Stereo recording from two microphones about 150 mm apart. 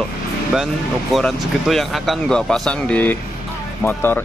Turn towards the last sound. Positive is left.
turn(degrees=15)  # may be behind; listen again after turning